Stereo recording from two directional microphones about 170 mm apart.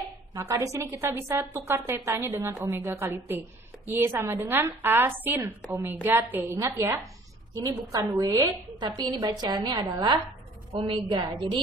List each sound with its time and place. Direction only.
0.3 s a woman's voice: 15° right (ahead or behind)